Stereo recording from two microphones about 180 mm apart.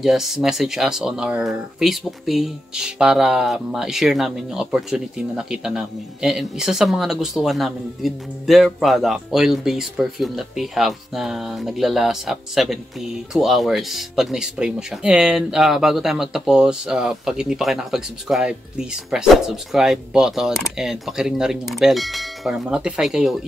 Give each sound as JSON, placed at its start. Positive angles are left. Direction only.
{"t": 0.0, "sound": "speech", "side_deg": 0}